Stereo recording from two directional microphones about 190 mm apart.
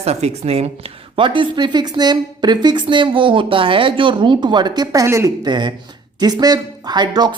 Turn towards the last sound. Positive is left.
turn(degrees=-20)  # may be behind; listen again after turning